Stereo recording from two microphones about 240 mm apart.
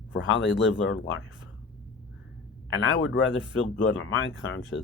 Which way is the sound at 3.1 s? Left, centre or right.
Left.